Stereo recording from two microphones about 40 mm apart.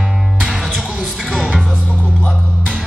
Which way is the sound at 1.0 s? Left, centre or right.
Centre.